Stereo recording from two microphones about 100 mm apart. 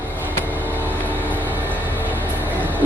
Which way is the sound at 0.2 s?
20° left (ahead or behind).